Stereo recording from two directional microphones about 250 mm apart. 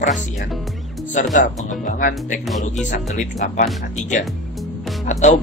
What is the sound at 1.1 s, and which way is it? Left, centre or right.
Speech, left.